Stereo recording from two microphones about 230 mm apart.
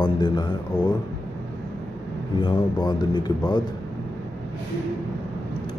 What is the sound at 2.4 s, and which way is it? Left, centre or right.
Speech, centre.